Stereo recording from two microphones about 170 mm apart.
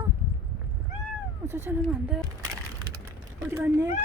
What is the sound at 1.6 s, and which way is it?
Speech, 5° right (ahead or behind).